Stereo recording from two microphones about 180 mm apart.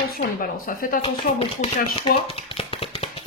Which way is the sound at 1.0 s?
30° left (ahead or behind).